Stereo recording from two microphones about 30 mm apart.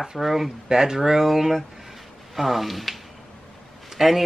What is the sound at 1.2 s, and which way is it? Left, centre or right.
Speech, centre.